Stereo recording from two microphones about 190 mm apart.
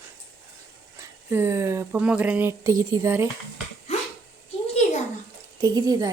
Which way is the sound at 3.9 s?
35° left (ahead or behind).